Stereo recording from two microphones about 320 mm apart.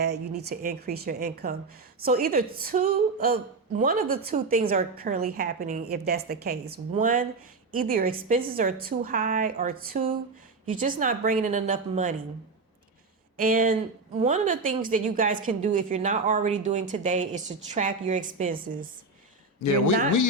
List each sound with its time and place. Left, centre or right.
0.0 s speech: right
13.3 s speech: right
19.5 s a man's voice: left